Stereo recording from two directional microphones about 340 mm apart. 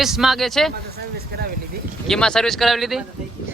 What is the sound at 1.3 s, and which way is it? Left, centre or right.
Speech, right.